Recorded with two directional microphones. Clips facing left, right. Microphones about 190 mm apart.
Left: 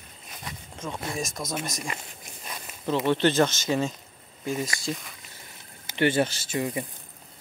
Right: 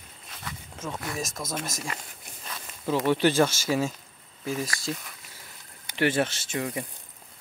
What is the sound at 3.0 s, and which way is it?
Speech, 10° right (ahead or behind).